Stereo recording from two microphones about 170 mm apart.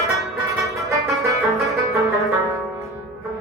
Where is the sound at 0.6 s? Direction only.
20° right (ahead or behind).